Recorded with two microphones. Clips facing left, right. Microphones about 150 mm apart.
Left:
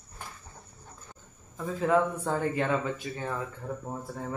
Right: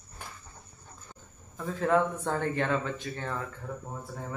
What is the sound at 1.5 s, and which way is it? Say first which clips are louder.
Speech: left 1 dB; 5° left (ahead or behind).